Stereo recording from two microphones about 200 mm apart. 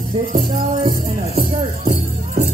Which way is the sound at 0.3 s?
40° right (ahead or behind).